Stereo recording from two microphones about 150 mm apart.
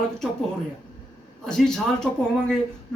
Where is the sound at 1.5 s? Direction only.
5° left (ahead or behind).